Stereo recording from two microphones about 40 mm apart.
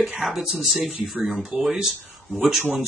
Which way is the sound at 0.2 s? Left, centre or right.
Centre.